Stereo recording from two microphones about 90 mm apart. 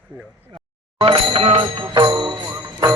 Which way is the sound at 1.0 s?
90° right.